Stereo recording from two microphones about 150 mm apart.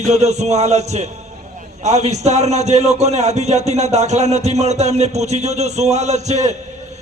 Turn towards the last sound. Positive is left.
turn(degrees=-50)  # may be behind; listen again after turning